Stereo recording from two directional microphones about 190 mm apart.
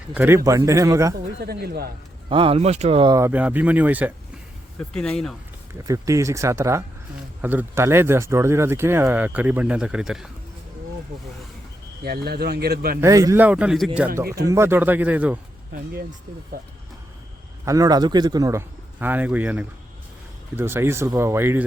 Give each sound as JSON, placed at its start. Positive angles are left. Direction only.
{"t": 0.1, "sound": "speech", "side_deg": -10}
{"t": 1.4, "sound": "speech", "side_deg": -55}
{"t": 2.3, "sound": "speech", "side_deg": -30}
{"t": 3.2, "sound": "speech", "side_deg": -10}
{"t": 4.8, "sound": "speech", "side_deg": 5}
{"t": 5.9, "sound": "speech", "side_deg": -15}
{"t": 12.0, "sound": "speech", "side_deg": -55}
{"t": 13.0, "sound": "speech", "side_deg": -15}
{"t": 14.4, "sound": "speech", "side_deg": -15}
{"t": 15.7, "sound": "speech", "side_deg": -50}
{"t": 17.7, "sound": "speech", "side_deg": -20}